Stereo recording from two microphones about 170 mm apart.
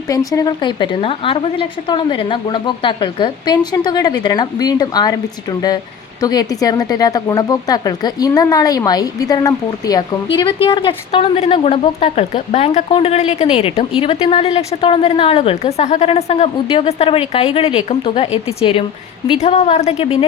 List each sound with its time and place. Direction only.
0.1 s a woman's voice: 20° left (ahead or behind); by 20.1 s 35° left (ahead or behind)